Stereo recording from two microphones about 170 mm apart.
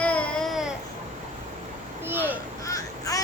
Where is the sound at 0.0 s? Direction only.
5° left (ahead or behind).